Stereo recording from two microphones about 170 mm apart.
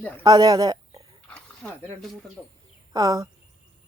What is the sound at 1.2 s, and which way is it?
Pig, 5° left (ahead or behind).